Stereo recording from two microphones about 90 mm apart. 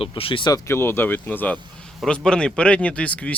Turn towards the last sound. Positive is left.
turn(degrees=15)  # may be behind; listen again after turning